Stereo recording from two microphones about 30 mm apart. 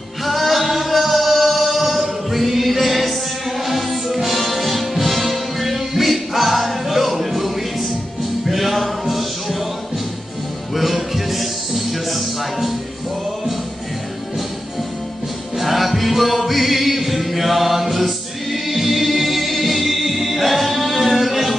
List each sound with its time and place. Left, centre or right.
0.2 s singing: centre
3.6 s music: centre
8.5 s a sound: centre
10.7 s music: centre
15.5 s music: centre